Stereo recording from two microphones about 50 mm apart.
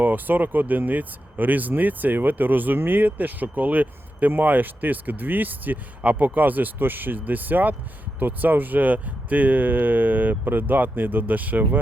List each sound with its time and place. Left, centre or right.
0.0 s speech: right